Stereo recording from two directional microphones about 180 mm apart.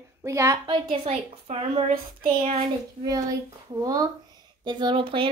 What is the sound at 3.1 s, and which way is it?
Speech, 20° right (ahead or behind).